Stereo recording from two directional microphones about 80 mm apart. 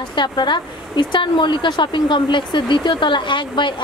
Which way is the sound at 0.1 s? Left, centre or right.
Left.